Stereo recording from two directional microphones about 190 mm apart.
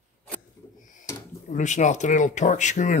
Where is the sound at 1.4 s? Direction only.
40° left (ahead or behind).